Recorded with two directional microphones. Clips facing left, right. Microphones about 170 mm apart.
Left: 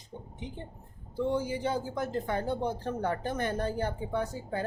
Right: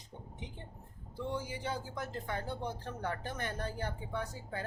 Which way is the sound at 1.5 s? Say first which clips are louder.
Left 8 dB; 30° left (ahead or behind).